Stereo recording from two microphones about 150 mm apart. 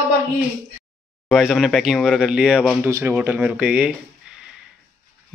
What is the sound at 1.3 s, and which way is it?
Speech, centre (ahead or behind).